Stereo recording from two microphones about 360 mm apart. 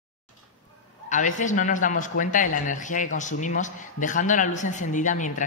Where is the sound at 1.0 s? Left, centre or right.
Left.